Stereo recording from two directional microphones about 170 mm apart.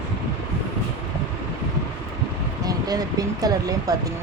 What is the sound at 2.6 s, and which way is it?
Speech, 20° right (ahead or behind).